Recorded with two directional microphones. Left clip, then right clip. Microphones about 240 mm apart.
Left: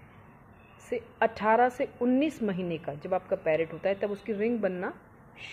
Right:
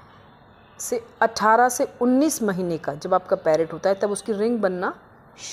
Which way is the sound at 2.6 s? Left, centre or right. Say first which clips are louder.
Right 8 dB; right.